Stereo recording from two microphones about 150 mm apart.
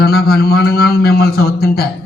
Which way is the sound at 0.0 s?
90° left.